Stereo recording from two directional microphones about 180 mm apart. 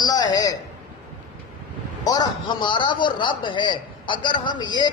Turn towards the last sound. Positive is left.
turn(degrees=25)  # may be behind; listen again after turning